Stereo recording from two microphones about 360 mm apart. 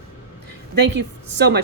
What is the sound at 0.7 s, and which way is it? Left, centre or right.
Speech, right.